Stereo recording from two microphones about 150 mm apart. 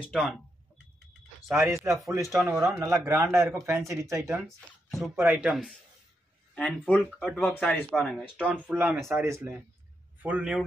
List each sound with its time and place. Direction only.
0.0 s speech: centre (ahead or behind)
1.6 s speech: 20° right (ahead or behind)
2.3 s speech: 5° right (ahead or behind)
2.8 s speech: 20° right (ahead or behind)
4.5 s speech: centre (ahead or behind)
5.1 s speech: 15° right (ahead or behind)
6.5 s speech: 5° left (ahead or behind)
7.5 s a man's voice: 15° left (ahead or behind)
7.9 s speech: 5° left (ahead or behind)
8.6 s speech: 5° right (ahead or behind)
9.1 s speech: 15° right (ahead or behind)